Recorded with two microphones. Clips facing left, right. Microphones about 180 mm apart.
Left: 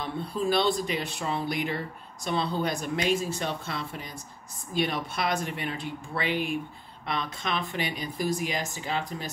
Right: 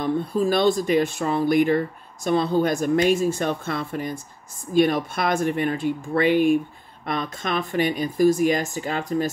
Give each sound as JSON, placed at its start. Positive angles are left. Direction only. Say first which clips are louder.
{"t": 0.0, "sound": "speech", "louder": "right 8 dB", "side_deg": -45}